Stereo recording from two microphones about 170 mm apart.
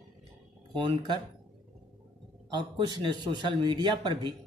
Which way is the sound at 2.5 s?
25° right (ahead or behind).